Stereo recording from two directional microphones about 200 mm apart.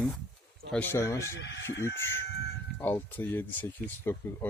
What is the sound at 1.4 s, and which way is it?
Speech, 65° left (ahead or behind).